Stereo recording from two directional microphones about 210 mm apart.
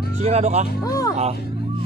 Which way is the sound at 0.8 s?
15° left (ahead or behind).